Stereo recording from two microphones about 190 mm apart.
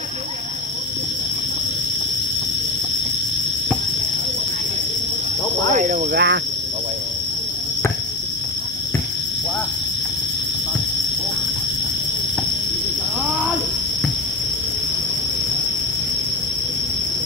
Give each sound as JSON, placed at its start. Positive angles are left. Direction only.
{"t": 5.8, "sound": "speech", "side_deg": -45}